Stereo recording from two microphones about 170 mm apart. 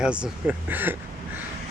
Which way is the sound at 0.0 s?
5° right (ahead or behind).